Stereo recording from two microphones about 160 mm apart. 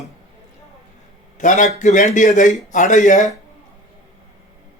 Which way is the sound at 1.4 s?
50° left (ahead or behind).